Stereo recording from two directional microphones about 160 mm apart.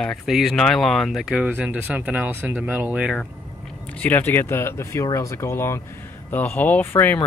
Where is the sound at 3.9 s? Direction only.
10° left (ahead or behind).